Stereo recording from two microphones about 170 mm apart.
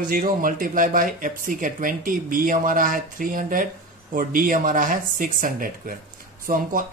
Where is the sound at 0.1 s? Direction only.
55° right (ahead or behind).